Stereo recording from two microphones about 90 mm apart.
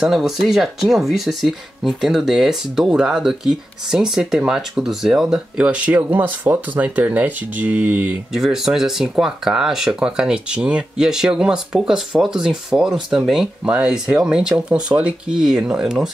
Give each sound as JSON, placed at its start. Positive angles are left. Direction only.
{"t": 0.0, "sound": "speech", "side_deg": -5}
{"t": 8.3, "sound": "speech", "side_deg": -5}